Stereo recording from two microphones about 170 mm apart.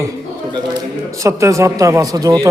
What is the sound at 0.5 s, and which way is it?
A man's voice, 20° right (ahead or behind).